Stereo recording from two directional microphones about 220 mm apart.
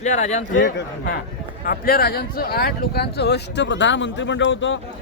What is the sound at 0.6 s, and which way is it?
Speech, 45° left (ahead or behind).